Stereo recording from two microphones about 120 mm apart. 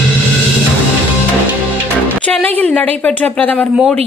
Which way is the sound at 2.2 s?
10° left (ahead or behind).